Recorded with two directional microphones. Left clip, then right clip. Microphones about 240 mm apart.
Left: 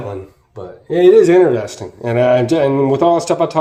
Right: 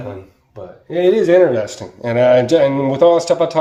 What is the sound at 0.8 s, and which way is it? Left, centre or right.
Speech, centre.